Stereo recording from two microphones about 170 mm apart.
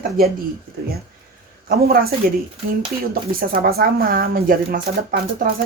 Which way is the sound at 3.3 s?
60° right (ahead or behind).